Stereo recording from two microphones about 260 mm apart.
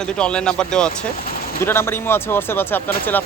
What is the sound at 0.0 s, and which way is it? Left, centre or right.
Speech, centre.